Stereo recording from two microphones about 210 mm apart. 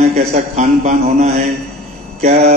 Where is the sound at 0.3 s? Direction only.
30° right (ahead or behind).